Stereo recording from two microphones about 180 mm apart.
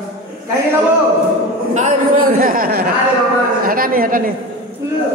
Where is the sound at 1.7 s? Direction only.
45° right (ahead or behind).